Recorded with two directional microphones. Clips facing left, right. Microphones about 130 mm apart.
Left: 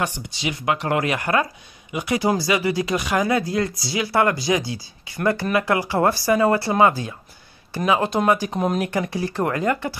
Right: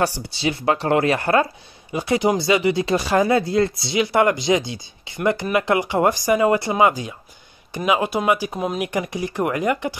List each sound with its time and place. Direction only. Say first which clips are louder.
0.0 s speech: right 4 dB; 35° right (ahead or behind); by 9.9 s 15° right (ahead or behind)